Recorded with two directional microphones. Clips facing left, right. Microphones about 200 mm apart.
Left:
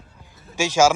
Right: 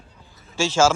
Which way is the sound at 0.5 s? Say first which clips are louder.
Left 1 dB; 15° left (ahead or behind).